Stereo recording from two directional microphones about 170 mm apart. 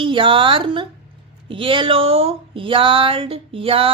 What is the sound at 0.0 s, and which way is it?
Speech, 30° right (ahead or behind).